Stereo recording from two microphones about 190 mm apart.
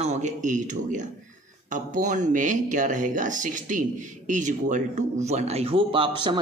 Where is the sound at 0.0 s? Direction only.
40° right (ahead or behind).